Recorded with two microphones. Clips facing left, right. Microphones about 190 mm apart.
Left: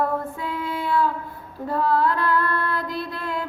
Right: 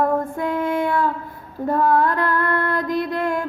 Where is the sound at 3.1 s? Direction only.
50° right (ahead or behind).